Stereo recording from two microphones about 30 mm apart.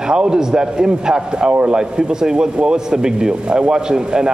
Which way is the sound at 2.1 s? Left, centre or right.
Right.